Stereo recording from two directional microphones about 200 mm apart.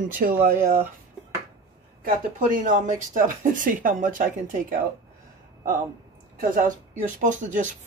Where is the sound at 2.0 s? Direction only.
45° right (ahead or behind).